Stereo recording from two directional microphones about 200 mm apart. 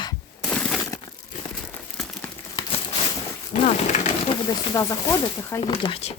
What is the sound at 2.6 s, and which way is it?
Crumpling, 20° left (ahead or behind).